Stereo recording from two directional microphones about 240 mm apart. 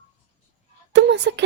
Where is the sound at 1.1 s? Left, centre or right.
Right.